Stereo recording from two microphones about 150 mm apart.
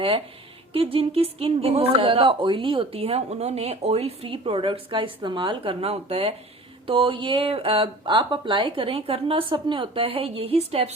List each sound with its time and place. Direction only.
0.7 s speech: 40° right (ahead or behind)